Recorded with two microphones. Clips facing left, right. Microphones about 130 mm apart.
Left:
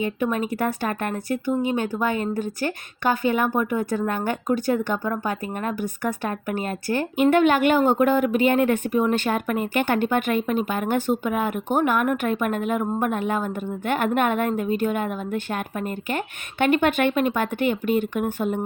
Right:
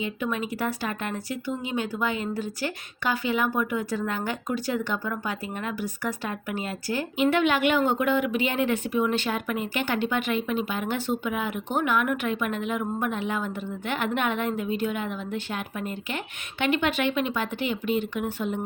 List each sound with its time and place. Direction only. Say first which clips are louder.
0.0 s speech: left 5 dB; 50° left (ahead or behind)